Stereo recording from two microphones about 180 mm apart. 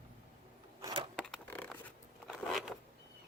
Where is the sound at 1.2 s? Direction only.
5° left (ahead or behind).